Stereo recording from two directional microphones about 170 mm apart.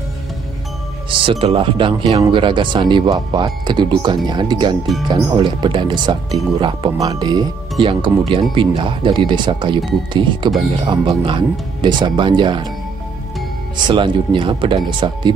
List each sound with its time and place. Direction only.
1.2 s speech: 35° right (ahead or behind)
13.8 s speech: 30° right (ahead or behind)